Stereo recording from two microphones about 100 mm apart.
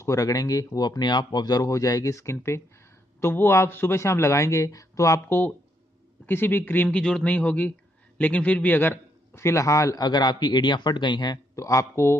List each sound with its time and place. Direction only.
0.0 s a man's voice: 35° left (ahead or behind)
6.2 s a man's voice: 20° left (ahead or behind); by 11.3 s 50° left (ahead or behind)
11.5 s a man's voice: 30° left (ahead or behind)